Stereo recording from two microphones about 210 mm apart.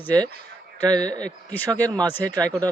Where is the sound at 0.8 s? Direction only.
20° right (ahead or behind).